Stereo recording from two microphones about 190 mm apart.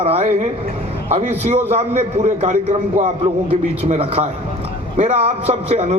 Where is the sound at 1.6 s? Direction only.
35° right (ahead or behind).